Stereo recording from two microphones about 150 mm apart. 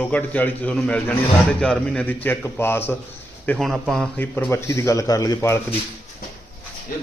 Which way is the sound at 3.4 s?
Centre (ahead or behind).